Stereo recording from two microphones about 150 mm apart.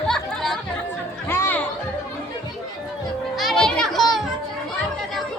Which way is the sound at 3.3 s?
Centre (ahead or behind).